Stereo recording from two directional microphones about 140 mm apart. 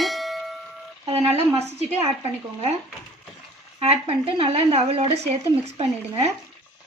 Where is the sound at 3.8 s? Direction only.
45° right (ahead or behind).